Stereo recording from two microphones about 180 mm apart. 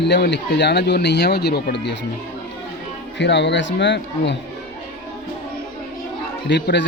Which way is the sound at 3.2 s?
75° left (ahead or behind).